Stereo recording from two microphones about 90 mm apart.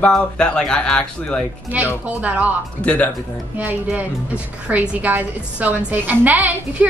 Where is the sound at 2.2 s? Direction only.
15° right (ahead or behind).